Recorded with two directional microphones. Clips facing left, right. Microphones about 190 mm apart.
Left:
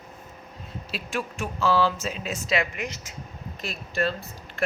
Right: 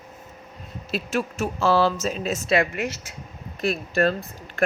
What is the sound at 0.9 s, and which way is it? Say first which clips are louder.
Speech: right 6 dB; 45° right (ahead or behind).